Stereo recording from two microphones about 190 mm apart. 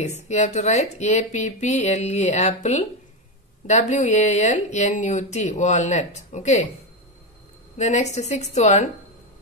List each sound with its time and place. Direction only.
0.3 s speech: 40° left (ahead or behind)
7.7 s speech: 35° left (ahead or behind)